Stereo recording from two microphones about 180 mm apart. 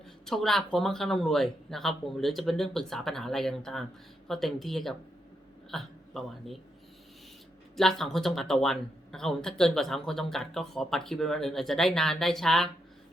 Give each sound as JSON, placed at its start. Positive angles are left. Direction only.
{"t": 0.3, "sound": "a man's voice", "side_deg": 0}
{"t": 7.8, "sound": "speech", "side_deg": 0}